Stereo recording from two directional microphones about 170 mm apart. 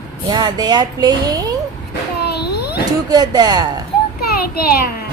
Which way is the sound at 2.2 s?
75° left (ahead or behind).